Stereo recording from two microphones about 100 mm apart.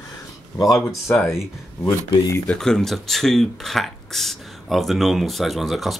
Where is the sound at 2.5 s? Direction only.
5° left (ahead or behind).